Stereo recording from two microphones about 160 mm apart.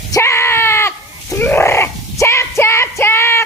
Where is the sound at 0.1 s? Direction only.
15° left (ahead or behind).